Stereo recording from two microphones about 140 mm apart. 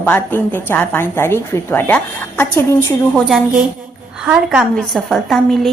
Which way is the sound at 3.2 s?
5° right (ahead or behind).